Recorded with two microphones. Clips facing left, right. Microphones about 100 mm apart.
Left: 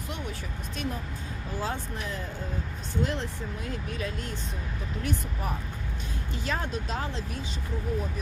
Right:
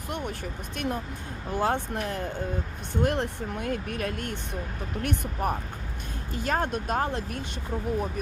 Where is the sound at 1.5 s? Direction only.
60° right (ahead or behind).